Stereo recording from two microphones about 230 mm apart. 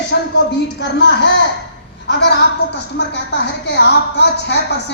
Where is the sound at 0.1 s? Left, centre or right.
Left.